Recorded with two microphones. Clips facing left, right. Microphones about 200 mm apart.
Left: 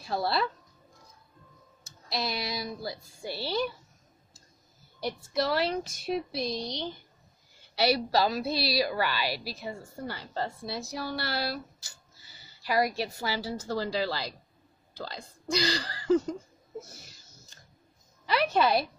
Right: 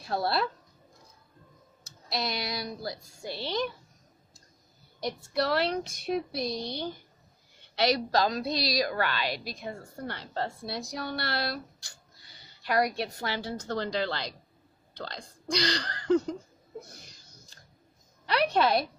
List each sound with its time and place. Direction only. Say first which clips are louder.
0.0 s speech: even; centre (ahead or behind)
1.9 s a woman's voice: even; centre (ahead or behind)
5.0 s a woman's voice: even; centre (ahead or behind)
7.7 s a woman's voice: even; 5° left (ahead or behind)
16.8 s a sound: even; 5° left (ahead or behind)
18.2 s a woman's voice: even; centre (ahead or behind)